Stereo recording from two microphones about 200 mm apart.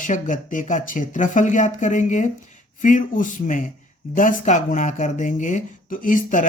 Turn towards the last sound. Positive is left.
turn(degrees=40)  # may be behind; listen again after turning